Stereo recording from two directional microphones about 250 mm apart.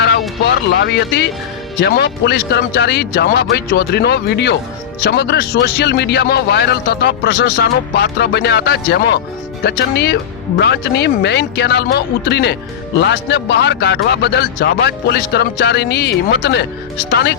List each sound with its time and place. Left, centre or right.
0.0 s music: left
1.8 s a man's voice: left